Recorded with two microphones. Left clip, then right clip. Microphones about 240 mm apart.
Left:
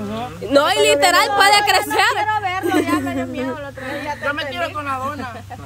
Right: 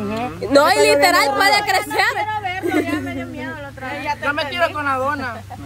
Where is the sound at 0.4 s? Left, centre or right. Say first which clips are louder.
Right 1 dB; centre.